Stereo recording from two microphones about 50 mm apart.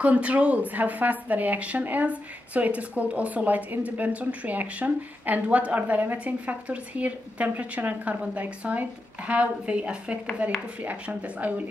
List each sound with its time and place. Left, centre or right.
0.0 s speech: right